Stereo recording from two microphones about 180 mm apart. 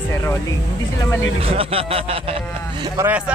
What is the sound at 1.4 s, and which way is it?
Speech, 30° right (ahead or behind).